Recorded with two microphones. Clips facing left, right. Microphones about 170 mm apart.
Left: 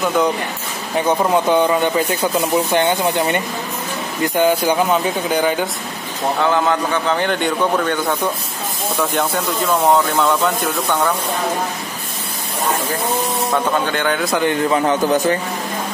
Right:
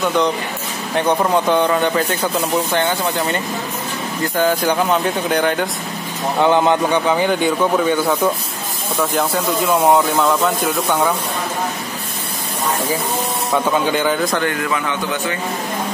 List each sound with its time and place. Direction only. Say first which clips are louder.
0.0 s speech: even; 5° left (ahead or behind)
4.4 s speech: left 1 dB; 10° left (ahead or behind)
6.4 s a man's voice: right 4 dB; 20° right (ahead or behind)
13.8 s speech: right 2 dB; 5° right (ahead or behind)
14.4 s a man's voice: left 4 dB; 30° left (ahead or behind)